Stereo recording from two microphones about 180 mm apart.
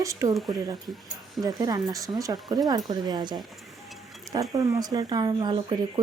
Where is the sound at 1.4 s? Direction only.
20° right (ahead or behind).